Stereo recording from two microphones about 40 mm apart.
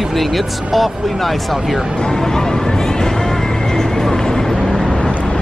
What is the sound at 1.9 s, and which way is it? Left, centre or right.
Vehicle, centre.